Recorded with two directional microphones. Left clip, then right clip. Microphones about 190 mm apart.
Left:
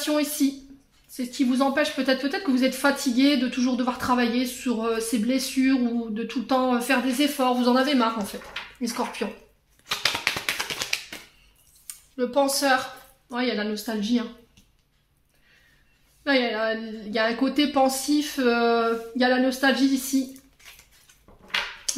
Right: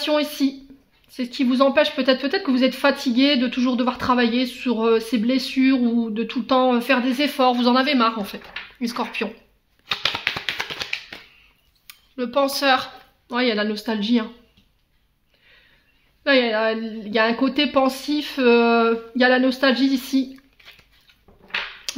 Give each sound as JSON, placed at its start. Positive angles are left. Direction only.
{"t": 0.0, "sound": "speech", "side_deg": -45}
{"t": 9.8, "sound": "a sound", "side_deg": -25}
{"t": 11.9, "sound": "speech", "side_deg": -30}
{"t": 13.3, "sound": "speech", "side_deg": -45}
{"t": 16.3, "sound": "speech", "side_deg": -45}
{"t": 21.9, "sound": "finger snapping", "side_deg": -35}